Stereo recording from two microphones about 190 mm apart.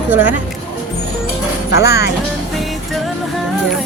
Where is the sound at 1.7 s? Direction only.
60° left (ahead or behind).